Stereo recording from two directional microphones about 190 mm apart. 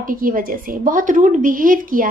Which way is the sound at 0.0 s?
45° right (ahead or behind).